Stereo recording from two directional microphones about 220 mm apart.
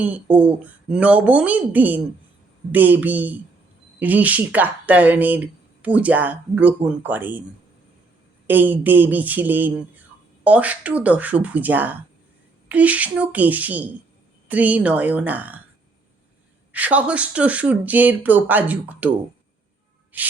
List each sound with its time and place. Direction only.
0.0 s speech: 5° right (ahead or behind)
8.4 s speech: 10° right (ahead or behind)
16.7 s speech: 5° right (ahead or behind)